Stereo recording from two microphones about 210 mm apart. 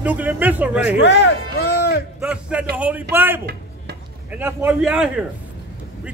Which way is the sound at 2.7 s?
5° right (ahead or behind).